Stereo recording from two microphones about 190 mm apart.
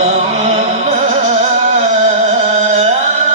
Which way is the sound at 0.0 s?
35° right (ahead or behind).